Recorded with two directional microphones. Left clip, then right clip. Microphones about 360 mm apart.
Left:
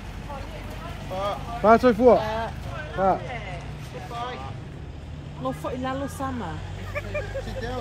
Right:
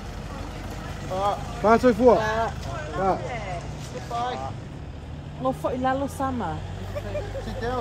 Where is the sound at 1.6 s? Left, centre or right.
Left.